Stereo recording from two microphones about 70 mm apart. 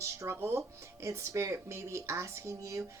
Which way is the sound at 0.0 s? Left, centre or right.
Right.